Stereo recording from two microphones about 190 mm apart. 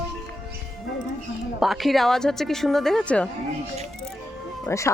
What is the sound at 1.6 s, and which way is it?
A woman's voice, centre (ahead or behind).